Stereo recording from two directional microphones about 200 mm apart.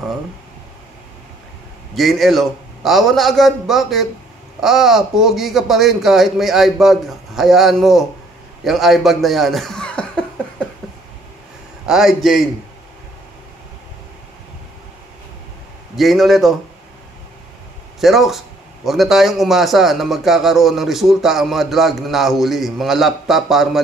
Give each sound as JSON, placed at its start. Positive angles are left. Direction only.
{"t": 2.0, "sound": "a man's voice", "side_deg": 0}
{"t": 11.9, "sound": "a man's voice", "side_deg": 0}
{"t": 16.0, "sound": "a man's voice", "side_deg": 0}
{"t": 18.0, "sound": "a man's voice", "side_deg": 0}